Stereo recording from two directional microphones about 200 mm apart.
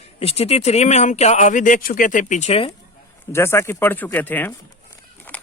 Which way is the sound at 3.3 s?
15° left (ahead or behind).